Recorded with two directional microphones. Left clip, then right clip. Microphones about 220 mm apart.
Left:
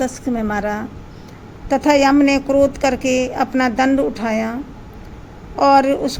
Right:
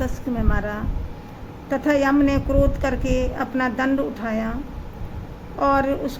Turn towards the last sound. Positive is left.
turn(degrees=20)  # may be behind; listen again after turning